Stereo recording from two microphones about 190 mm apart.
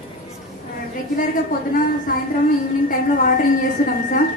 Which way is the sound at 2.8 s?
50° left (ahead or behind).